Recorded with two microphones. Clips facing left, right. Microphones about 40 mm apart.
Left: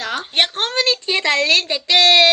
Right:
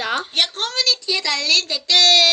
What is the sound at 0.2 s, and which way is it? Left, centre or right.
A woman's voice, left.